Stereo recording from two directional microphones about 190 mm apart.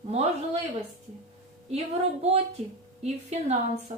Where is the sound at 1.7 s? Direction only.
35° right (ahead or behind).